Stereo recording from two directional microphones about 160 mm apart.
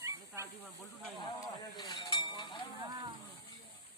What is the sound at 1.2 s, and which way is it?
Chink, 25° left (ahead or behind).